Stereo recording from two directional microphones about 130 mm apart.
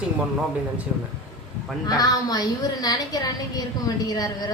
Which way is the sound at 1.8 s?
30° left (ahead or behind).